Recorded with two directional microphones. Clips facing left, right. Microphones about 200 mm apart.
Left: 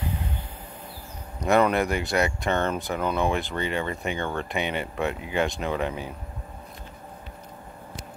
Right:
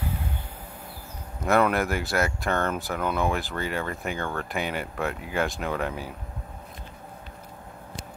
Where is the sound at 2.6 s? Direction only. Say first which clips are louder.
Left 1 dB; 20° left (ahead or behind).